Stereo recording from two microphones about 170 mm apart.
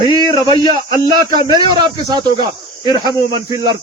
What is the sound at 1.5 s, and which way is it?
Speech, 25° right (ahead or behind).